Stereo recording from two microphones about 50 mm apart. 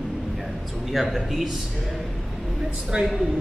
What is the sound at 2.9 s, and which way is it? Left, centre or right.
Speech, right.